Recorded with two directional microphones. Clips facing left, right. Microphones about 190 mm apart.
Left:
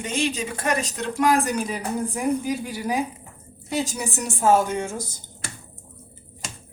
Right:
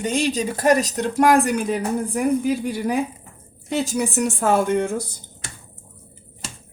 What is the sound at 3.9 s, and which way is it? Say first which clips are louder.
Speech: right 8 dB; 60° right (ahead or behind).